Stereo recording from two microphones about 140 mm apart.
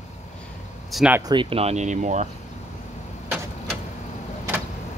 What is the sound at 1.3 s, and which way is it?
Speech, 40° right (ahead or behind).